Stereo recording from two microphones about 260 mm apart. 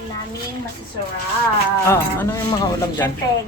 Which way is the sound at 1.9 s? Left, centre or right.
Centre.